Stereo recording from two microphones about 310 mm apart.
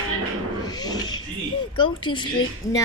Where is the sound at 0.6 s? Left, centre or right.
Centre.